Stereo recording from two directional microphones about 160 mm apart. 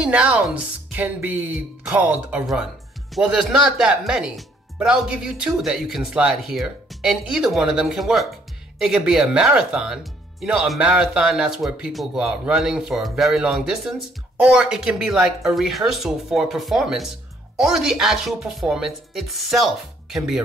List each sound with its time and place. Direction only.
0.0 s speech: 10° right (ahead or behind)